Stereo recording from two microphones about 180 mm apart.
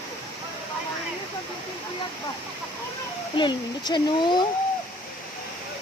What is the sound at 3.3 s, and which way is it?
A child's voice, 25° left (ahead or behind).